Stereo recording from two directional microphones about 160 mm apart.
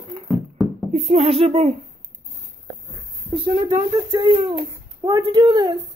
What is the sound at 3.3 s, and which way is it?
A man's voice, 30° right (ahead or behind).